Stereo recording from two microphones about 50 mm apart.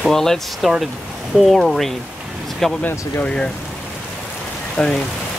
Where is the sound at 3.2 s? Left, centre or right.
Centre.